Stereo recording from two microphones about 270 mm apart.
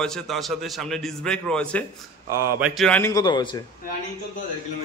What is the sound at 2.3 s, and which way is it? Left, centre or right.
A man's voice, centre.